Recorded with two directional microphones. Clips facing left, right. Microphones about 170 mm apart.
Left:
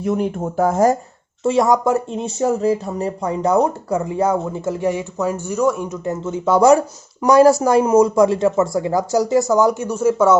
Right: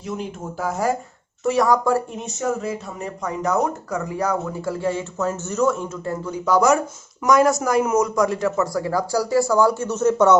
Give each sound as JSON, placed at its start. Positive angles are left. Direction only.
{"t": 0.0, "sound": "speech", "side_deg": 55}
{"t": 1.5, "sound": "speech", "side_deg": 25}